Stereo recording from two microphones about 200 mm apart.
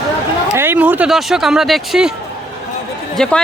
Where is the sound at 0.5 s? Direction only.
10° right (ahead or behind).